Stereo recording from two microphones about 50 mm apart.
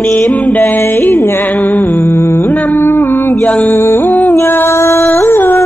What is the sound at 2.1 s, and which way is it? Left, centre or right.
Humming, left.